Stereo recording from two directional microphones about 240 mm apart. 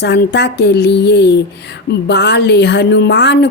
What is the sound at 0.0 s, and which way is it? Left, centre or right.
A woman's voice, left.